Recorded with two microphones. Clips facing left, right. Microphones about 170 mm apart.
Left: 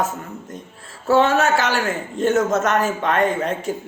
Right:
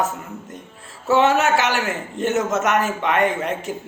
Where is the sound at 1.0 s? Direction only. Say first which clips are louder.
Left 1 dB; 20° right (ahead or behind).